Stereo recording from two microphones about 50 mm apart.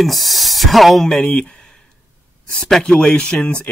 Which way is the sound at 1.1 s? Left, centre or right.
Centre.